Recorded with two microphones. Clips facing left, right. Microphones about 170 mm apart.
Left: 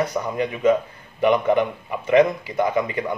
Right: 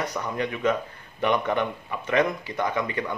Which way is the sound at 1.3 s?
10° left (ahead or behind).